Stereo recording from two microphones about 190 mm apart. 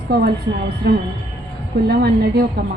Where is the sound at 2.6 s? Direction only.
60° right (ahead or behind).